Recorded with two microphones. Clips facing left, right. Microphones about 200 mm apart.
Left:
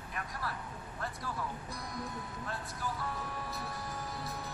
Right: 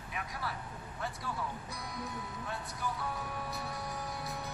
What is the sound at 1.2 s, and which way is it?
Music, centre (ahead or behind).